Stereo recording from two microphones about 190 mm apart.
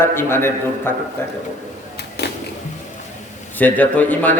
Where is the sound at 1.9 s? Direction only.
60° left (ahead or behind).